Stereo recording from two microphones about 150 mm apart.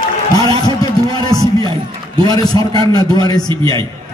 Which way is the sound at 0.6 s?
25° left (ahead or behind).